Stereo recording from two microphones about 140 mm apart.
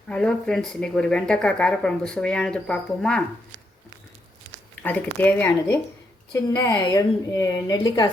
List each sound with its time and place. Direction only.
0.1 s speech: 5° left (ahead or behind)
4.8 s a woman's voice: 15° left (ahead or behind)